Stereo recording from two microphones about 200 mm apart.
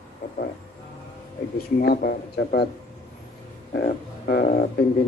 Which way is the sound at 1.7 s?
50° left (ahead or behind).